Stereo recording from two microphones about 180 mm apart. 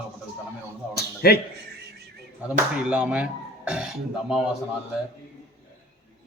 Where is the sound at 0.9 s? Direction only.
60° left (ahead or behind).